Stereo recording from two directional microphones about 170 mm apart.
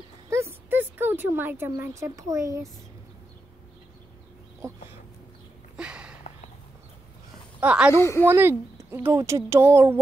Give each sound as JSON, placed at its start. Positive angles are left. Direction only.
{"t": 0.3, "sound": "speech", "side_deg": -15}
{"t": 4.6, "sound": "a sound", "side_deg": -15}
{"t": 5.8, "sound": "a sound", "side_deg": -5}
{"t": 7.6, "sound": "a woman's voice", "side_deg": -5}
{"t": 7.9, "sound": "a woman's voice", "side_deg": 15}
{"t": 8.3, "sound": "a woman's voice", "side_deg": -15}